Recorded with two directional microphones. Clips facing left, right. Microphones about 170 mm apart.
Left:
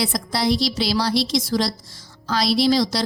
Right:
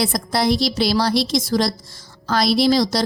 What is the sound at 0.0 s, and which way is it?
A woman's voice, 50° right (ahead or behind).